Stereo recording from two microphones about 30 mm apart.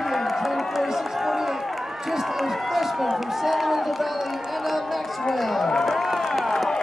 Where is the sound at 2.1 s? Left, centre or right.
Centre.